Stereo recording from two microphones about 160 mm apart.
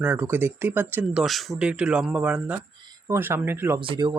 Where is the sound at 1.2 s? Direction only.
Centre (ahead or behind).